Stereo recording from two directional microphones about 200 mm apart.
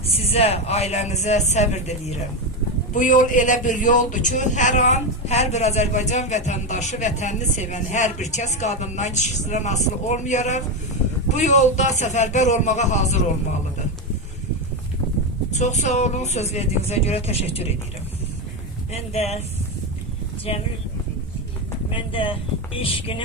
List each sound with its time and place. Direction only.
0.1 s a man's voice: 30° left (ahead or behind)
15.5 s a man's voice: 35° left (ahead or behind)
18.9 s a man's voice: 30° left (ahead or behind)
21.9 s speech: 25° left (ahead or behind)